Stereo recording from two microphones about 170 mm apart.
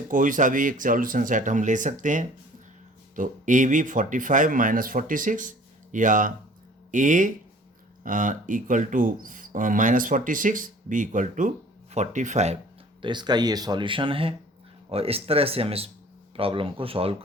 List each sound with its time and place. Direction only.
0.1 s speech: 50° right (ahead or behind)
13.0 s speech: 25° right (ahead or behind)